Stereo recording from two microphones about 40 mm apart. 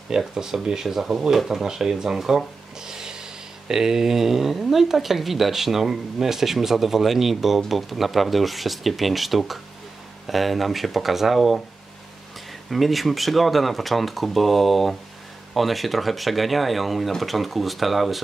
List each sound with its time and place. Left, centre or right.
0.3 s speech: centre
2.9 s a sound: centre
3.6 s speech: centre
12.6 s speech: centre